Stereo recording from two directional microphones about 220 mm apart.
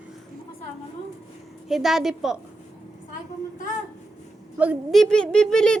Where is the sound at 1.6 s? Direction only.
Centre (ahead or behind).